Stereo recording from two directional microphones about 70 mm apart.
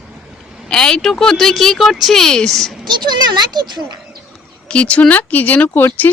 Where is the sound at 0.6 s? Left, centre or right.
Centre.